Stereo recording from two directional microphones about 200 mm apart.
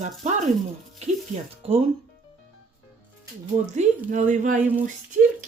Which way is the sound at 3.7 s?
35° right (ahead or behind).